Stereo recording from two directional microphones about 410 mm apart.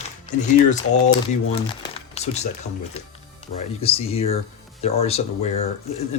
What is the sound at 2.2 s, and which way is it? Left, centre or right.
Speech, centre.